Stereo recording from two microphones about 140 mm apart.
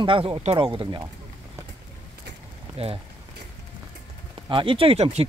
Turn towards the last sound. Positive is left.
turn(degrees=-45)  # may be behind; listen again after turning